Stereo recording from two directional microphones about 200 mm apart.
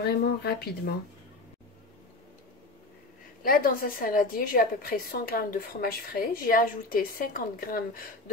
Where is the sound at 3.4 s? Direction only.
45° left (ahead or behind).